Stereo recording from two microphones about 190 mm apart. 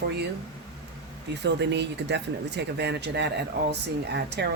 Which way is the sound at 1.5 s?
65° right (ahead or behind).